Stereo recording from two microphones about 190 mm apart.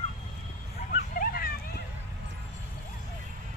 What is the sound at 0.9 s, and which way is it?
Vehicle, 50° left (ahead or behind).